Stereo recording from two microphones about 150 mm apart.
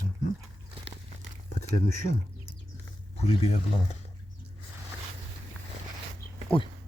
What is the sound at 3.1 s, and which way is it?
Speech, 45° left (ahead or behind).